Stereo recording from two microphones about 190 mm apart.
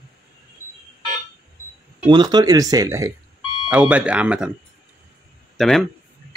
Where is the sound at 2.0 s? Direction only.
20° right (ahead or behind).